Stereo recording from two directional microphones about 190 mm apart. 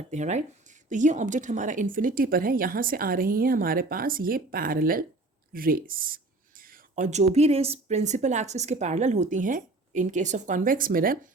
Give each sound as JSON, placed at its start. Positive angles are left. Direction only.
{"t": 0.1, "sound": "speech", "side_deg": -35}